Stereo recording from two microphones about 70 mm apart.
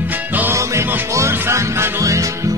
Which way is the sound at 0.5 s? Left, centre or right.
Right.